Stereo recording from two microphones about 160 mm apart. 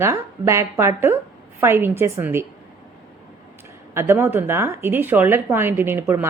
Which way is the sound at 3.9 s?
15° right (ahead or behind).